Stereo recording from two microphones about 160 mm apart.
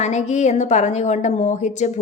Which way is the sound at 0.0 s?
45° left (ahead or behind).